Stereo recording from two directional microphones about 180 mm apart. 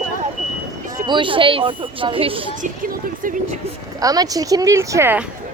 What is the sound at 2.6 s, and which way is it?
Speech, 50° right (ahead or behind).